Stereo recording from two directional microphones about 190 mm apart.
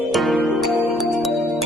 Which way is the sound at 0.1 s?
Centre (ahead or behind).